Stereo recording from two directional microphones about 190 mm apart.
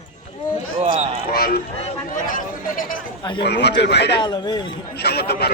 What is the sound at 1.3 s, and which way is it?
Speech, 55° left (ahead or behind).